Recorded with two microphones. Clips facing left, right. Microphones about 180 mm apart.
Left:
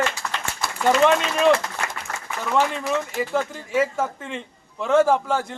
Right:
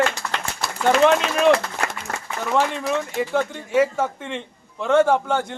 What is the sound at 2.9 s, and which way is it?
A man's voice, centre (ahead or behind).